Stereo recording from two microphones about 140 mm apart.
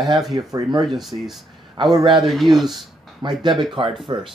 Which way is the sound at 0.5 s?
25° right (ahead or behind).